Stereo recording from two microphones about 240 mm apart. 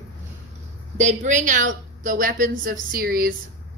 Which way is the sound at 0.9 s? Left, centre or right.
Right.